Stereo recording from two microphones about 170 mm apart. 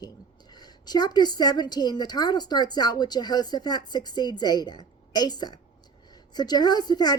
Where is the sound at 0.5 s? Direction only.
25° left (ahead or behind).